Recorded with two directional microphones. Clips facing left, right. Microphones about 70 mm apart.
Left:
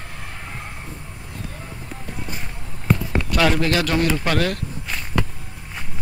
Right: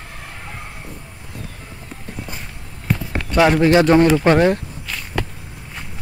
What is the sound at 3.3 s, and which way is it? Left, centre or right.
Speech, right.